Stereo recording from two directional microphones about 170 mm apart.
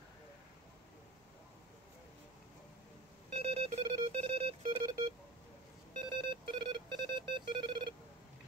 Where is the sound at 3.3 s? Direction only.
35° right (ahead or behind).